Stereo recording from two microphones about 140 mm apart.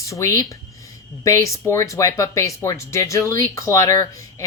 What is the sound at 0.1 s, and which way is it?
Speech, 25° left (ahead or behind).